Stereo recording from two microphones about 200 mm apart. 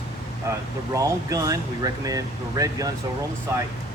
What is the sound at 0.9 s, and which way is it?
Speech, 15° right (ahead or behind).